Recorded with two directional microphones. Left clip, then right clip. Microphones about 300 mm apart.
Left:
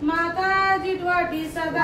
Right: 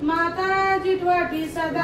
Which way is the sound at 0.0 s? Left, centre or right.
Centre.